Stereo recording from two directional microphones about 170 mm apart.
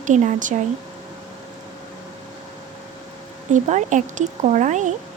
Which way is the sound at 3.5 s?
45° right (ahead or behind).